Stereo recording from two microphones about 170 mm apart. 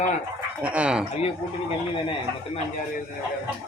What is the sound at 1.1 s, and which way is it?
Speech, 35° left (ahead or behind).